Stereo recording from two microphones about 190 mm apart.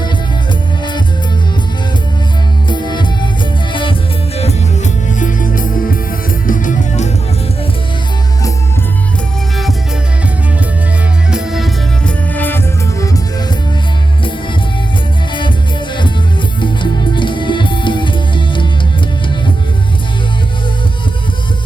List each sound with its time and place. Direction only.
2.6 s music: 25° left (ahead or behind)
4.4 s music: 35° left (ahead or behind)
11.3 s music: 5° right (ahead or behind); by 13.1 s 15° left (ahead or behind)
16.6 s music: 25° left (ahead or behind)